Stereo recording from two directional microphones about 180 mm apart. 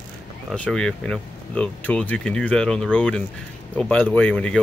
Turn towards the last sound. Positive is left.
turn(degrees=5)  # may be behind; listen again after turning